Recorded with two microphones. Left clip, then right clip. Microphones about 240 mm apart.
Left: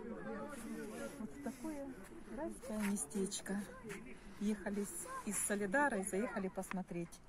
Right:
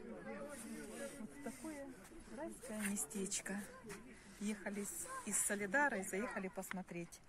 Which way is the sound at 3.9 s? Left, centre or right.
Centre.